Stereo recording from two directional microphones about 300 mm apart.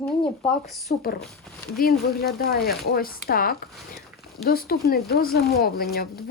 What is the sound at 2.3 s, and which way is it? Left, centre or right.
Speech, left.